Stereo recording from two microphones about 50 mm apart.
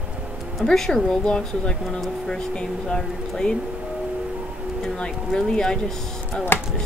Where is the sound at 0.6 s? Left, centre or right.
Centre.